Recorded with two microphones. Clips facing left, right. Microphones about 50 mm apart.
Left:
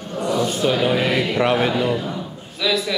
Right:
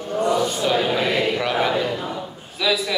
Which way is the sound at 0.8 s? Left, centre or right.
Left.